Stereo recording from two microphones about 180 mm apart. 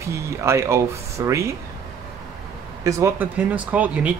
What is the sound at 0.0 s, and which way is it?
Speech, 15° right (ahead or behind).